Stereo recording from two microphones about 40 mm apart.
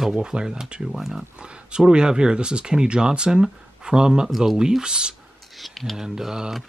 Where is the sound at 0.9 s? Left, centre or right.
Centre.